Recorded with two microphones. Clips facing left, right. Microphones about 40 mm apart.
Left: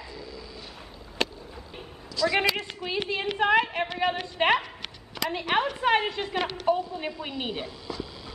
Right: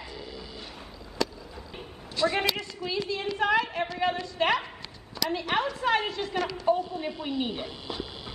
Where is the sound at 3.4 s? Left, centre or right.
Left.